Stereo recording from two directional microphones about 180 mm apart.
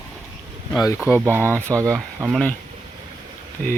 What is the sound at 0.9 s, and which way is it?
Speech, 10° right (ahead or behind).